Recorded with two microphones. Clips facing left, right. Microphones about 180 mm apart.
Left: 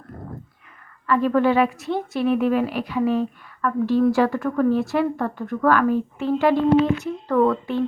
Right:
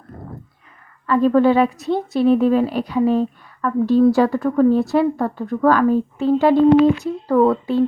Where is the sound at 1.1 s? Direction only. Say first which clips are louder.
Right 4 dB; 30° right (ahead or behind).